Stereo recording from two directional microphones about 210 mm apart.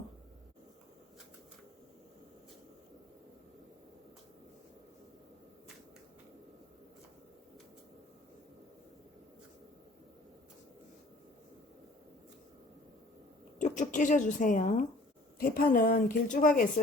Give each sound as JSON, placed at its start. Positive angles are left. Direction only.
{"t": 13.6, "sound": "a woman's voice", "side_deg": 35}